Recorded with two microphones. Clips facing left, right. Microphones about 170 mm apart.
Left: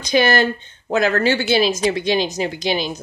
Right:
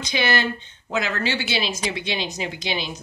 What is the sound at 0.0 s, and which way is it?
Speech, 45° left (ahead or behind).